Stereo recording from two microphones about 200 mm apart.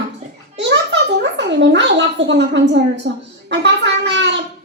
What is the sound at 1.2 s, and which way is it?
A child's voice, 65° right (ahead or behind).